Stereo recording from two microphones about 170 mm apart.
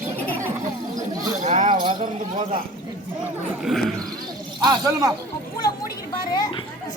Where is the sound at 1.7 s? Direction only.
30° right (ahead or behind).